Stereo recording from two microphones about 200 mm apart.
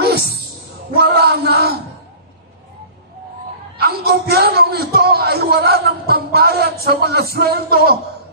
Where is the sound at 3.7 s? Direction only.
50° right (ahead or behind).